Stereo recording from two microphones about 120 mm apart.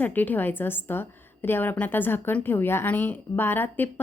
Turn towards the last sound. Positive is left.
turn(degrees=15)  # may be behind; listen again after turning